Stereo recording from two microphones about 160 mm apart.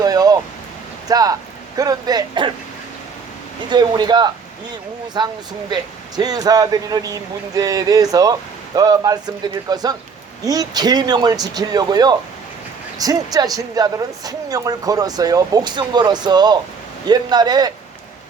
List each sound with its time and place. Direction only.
0.0 s a sound: 25° right (ahead or behind)
1.0 s speech: 25° right (ahead or behind)
3.7 s speech: 25° right (ahead or behind)